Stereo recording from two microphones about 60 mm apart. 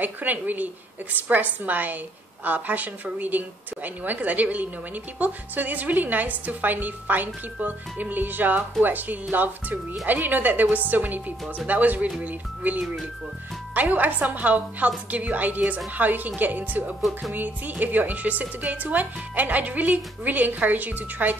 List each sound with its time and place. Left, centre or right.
0.0 s a woman's voice: right